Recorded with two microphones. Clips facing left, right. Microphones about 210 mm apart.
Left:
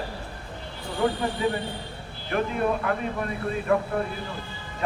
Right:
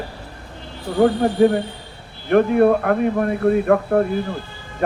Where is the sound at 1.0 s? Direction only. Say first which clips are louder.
Right 10 dB; 55° right (ahead or behind).